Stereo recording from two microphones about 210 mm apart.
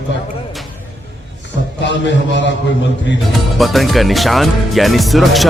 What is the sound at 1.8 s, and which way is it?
A man's voice, 60° left (ahead or behind).